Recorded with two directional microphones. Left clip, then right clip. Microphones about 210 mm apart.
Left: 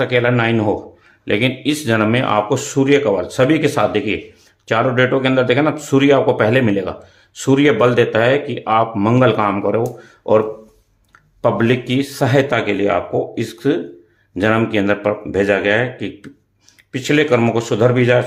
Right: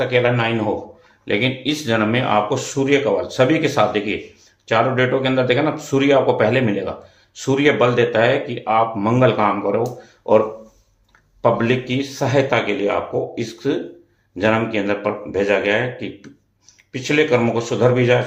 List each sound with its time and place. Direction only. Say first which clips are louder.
0.0 s speech: left 2 dB; 50° left (ahead or behind)
11.4 s speech: left 1 dB; 45° left (ahead or behind)